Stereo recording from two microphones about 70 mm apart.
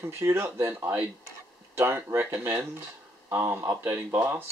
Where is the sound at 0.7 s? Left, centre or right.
Right.